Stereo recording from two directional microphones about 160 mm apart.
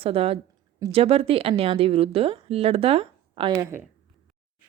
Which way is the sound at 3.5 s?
15° right (ahead or behind).